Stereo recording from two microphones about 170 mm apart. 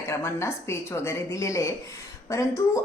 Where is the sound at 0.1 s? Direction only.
15° left (ahead or behind).